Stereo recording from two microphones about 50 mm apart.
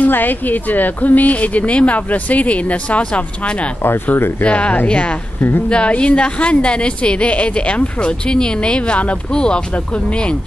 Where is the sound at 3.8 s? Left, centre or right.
Left.